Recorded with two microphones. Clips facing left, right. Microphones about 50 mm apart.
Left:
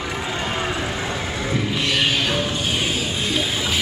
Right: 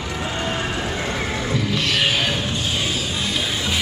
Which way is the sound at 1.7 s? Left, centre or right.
Centre.